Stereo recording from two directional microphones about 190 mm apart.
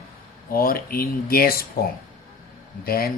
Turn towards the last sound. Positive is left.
turn(degrees=50)  # may be behind; listen again after turning